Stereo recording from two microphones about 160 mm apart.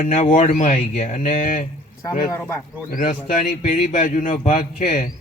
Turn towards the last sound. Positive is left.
turn(degrees=50)  # may be behind; listen again after turning